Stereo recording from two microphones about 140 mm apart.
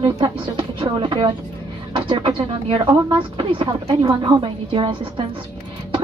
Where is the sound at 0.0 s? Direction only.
35° right (ahead or behind).